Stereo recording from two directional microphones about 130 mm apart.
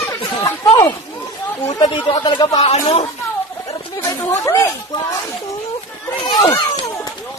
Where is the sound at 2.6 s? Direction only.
50° left (ahead or behind).